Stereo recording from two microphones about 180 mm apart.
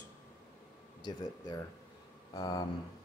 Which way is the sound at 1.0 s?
25° left (ahead or behind).